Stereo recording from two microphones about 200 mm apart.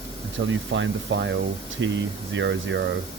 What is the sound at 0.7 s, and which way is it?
Speech, 65° right (ahead or behind).